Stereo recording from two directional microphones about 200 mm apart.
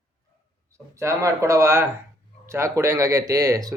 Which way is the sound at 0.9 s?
15° right (ahead or behind).